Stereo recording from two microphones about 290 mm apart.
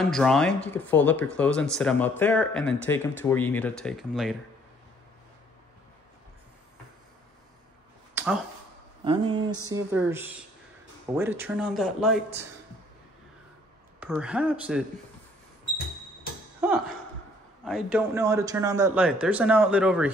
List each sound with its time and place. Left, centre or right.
0.1 s speech: centre
8.1 s a sound: centre
9.0 s speech: centre
13.9 s speech: centre
17.6 s speech: centre